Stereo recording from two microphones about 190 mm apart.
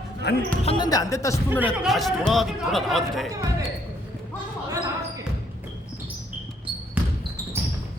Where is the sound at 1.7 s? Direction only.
Centre (ahead or behind).